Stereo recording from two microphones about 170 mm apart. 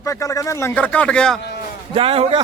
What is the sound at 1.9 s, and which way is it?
Speech, 35° right (ahead or behind).